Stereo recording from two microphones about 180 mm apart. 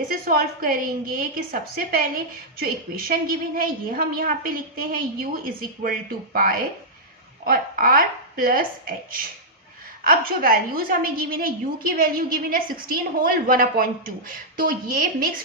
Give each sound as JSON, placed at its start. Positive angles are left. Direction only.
{"t": 0.1, "sound": "a woman's voice", "side_deg": -55}
{"t": 10.0, "sound": "a woman's voice", "side_deg": -55}